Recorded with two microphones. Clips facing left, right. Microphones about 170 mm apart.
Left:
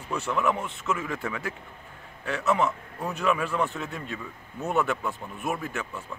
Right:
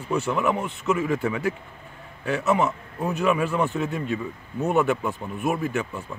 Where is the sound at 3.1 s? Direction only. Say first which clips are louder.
Right 4 dB; 5° right (ahead or behind).